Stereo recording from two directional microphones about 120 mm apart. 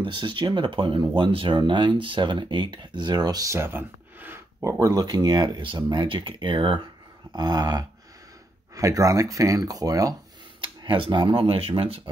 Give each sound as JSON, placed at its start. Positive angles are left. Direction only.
{"t": 0.0, "sound": "speech", "side_deg": -45}
{"t": 10.8, "sound": "speech", "side_deg": -40}